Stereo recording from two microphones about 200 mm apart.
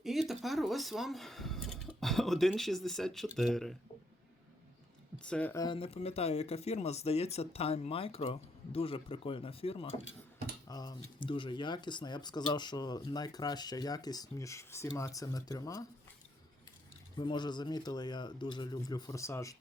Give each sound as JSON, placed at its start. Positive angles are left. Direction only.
{"t": 0.0, "sound": "speech", "side_deg": 0}
{"t": 5.2, "sound": "speech", "side_deg": 5}
{"t": 5.6, "sound": "speech", "side_deg": 25}
{"t": 17.2, "sound": "speech", "side_deg": 20}